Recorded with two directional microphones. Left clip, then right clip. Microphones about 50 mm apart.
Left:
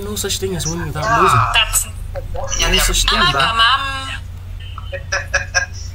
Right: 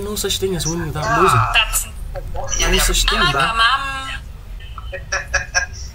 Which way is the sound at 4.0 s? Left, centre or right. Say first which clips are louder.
Left 1 dB; left.